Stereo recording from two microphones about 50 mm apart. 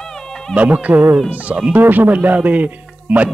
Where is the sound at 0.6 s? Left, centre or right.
Right.